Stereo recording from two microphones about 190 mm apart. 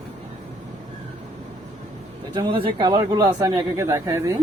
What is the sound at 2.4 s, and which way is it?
Speech, 25° right (ahead or behind).